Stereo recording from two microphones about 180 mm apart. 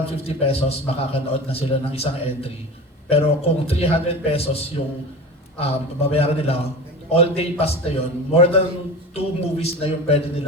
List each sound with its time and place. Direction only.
0.3 s a man's voice: 35° left (ahead or behind)